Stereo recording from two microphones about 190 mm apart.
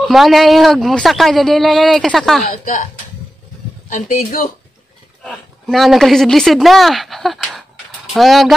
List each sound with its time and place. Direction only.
0.0 s speech: centre (ahead or behind)
2.5 s speech: 45° left (ahead or behind)
3.9 s speech: 45° left (ahead or behind)
5.2 s speech: centre (ahead or behind)